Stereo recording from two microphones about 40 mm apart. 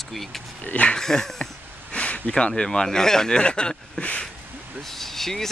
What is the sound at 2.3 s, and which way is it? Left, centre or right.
Speech, centre.